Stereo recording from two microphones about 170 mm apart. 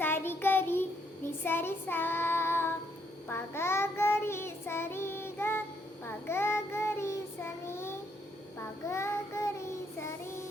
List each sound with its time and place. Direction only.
0.0 s child singing: 15° left (ahead or behind)